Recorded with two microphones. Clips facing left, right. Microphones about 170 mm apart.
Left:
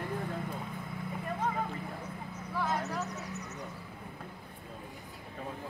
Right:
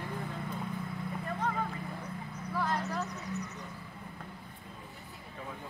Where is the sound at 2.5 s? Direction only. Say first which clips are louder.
Even; centre (ahead or behind).